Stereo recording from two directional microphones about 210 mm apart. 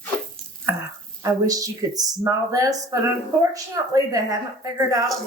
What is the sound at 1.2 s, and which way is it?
Speech, 15° right (ahead or behind).